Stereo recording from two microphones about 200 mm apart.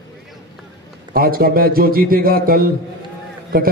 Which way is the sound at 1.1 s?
50° right (ahead or behind).